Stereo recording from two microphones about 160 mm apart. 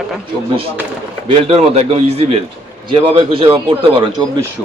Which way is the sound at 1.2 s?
40° right (ahead or behind).